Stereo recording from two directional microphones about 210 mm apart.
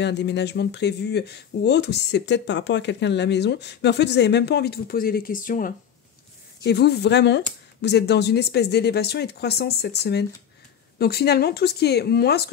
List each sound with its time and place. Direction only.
0.0 s speech: 55° left (ahead or behind); by 5.7 s 40° left (ahead or behind)
6.6 s speech: 50° left (ahead or behind)